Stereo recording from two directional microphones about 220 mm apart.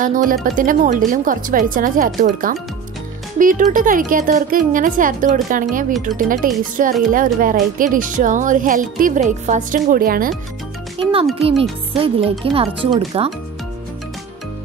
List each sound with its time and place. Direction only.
0.0 s speech: 35° right (ahead or behind)
11.9 s speech: 25° right (ahead or behind)